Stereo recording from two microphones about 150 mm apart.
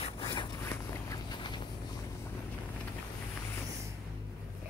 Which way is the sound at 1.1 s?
30° left (ahead or behind).